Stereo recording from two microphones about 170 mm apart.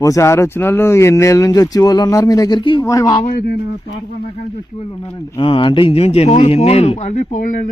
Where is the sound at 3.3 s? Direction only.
70° left (ahead or behind).